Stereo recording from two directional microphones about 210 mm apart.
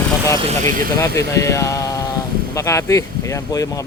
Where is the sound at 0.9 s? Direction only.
15° left (ahead or behind).